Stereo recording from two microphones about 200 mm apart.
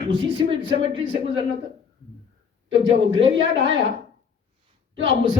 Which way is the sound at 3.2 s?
65° right (ahead or behind).